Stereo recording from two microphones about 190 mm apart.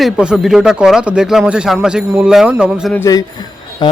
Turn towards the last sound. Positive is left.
turn(degrees=20)  # may be behind; listen again after turning